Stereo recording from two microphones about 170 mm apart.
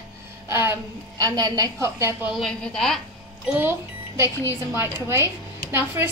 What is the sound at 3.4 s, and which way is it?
A woman's voice, 10° right (ahead or behind).